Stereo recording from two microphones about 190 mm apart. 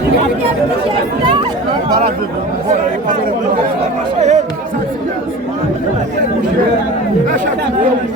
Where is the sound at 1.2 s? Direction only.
25° right (ahead or behind).